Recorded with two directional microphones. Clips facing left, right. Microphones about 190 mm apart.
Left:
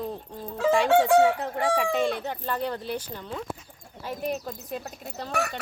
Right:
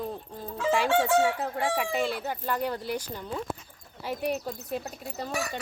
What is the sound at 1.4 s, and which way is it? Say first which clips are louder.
Speech: left 3 dB; 5° right (ahead or behind).